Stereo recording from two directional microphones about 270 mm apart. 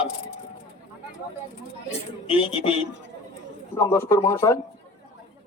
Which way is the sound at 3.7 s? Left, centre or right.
Centre.